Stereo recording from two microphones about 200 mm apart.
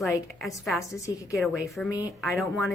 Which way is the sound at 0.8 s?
15° left (ahead or behind).